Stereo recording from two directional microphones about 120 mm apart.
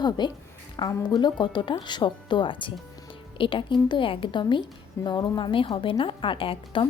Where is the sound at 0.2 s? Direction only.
40° left (ahead or behind).